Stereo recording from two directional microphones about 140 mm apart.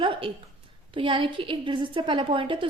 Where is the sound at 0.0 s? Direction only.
40° right (ahead or behind).